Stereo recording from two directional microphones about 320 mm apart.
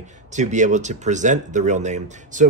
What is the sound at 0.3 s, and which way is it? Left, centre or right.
Speech, right.